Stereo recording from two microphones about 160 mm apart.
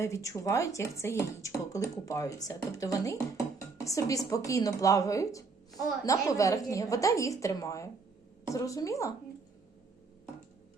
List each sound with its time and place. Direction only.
0.0 s speech: 20° left (ahead or behind)